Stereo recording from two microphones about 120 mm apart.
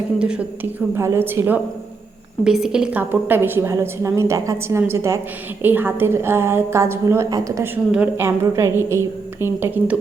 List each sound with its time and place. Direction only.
0.2 s a woman's voice: 10° right (ahead or behind)
0.9 s a woman's voice: 20° right (ahead or behind)
2.4 s a woman's voice: 5° right (ahead or behind)